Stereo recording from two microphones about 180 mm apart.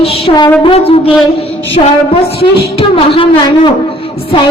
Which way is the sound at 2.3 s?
30° left (ahead or behind).